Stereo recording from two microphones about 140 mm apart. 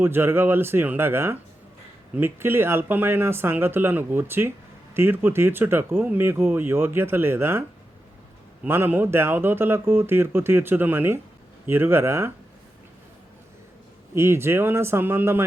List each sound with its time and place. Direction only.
0.0 s speech: 15° right (ahead or behind)
8.6 s speech: 15° right (ahead or behind)
14.2 s speech: 20° right (ahead or behind)